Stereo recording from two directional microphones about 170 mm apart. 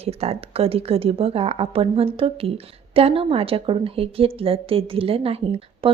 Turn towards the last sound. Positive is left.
turn(degrees=-35)  # may be behind; listen again after turning